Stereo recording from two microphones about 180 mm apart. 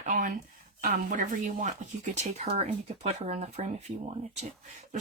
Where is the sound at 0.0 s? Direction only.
45° right (ahead or behind).